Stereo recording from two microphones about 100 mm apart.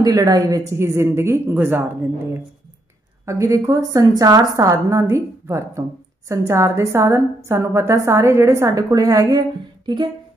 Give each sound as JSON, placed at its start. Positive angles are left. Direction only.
{"t": 0.0, "sound": "speech", "side_deg": -40}
{"t": 3.3, "sound": "a woman's voice", "side_deg": -30}